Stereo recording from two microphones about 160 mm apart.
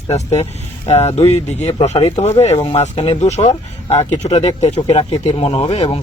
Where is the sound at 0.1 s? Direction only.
45° left (ahead or behind).